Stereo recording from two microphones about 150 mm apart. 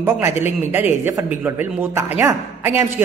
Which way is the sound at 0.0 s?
15° right (ahead or behind).